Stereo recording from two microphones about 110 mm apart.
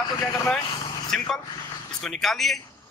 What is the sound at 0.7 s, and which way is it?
Vehicle, 45° left (ahead or behind).